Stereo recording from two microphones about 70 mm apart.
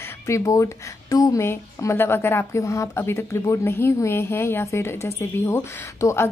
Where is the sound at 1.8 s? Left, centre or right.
Left.